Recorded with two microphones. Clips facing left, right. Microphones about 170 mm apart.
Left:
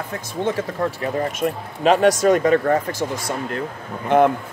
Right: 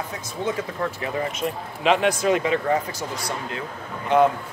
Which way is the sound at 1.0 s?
40° left (ahead or behind).